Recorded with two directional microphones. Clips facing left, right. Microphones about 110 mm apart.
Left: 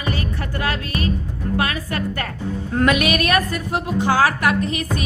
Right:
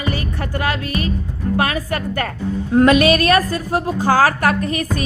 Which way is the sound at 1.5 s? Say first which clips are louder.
Right 3 dB; 35° right (ahead or behind).